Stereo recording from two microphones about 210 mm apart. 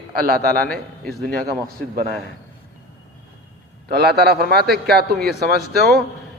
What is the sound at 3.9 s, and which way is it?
A man's voice, 50° right (ahead or behind).